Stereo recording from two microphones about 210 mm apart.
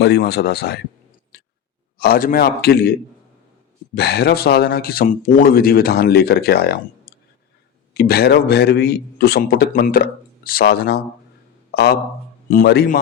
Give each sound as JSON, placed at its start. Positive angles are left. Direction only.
{"t": 0.0, "sound": "speech", "side_deg": 50}
{"t": 1.3, "sound": "a sound", "side_deg": 50}
{"t": 2.0, "sound": "speech", "side_deg": 45}
{"t": 3.9, "sound": "a man's voice", "side_deg": 50}